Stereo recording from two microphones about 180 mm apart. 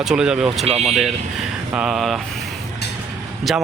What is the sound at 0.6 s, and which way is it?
Speech, 35° right (ahead or behind).